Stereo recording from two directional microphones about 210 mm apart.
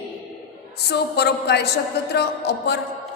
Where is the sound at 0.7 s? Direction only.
50° left (ahead or behind).